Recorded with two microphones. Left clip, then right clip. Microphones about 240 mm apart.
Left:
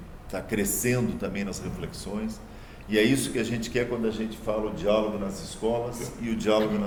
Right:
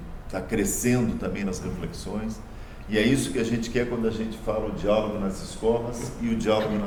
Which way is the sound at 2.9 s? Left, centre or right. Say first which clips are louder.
Even; left.